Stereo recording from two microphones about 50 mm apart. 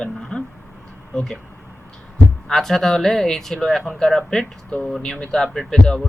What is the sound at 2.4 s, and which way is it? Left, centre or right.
Speech, centre.